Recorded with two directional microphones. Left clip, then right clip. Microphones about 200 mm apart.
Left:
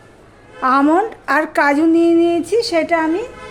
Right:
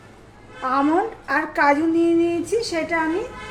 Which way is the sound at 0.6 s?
60° left (ahead or behind).